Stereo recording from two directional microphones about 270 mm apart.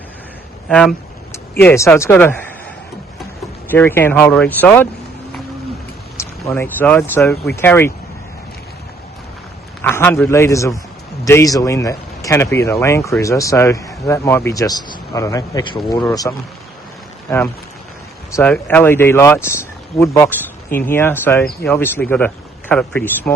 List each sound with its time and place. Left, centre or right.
0.7 s speech: centre
3.7 s speech: centre
6.1 s speech: centre
9.8 s a man's voice: centre